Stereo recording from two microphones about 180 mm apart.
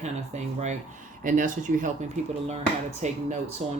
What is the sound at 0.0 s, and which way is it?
Speech, 40° right (ahead or behind).